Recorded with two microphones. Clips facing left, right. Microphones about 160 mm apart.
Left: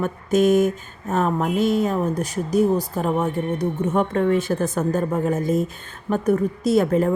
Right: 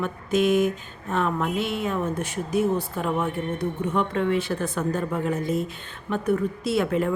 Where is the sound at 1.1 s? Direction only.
40° left (ahead or behind).